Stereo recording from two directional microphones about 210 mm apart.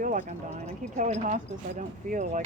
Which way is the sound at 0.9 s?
35° right (ahead or behind).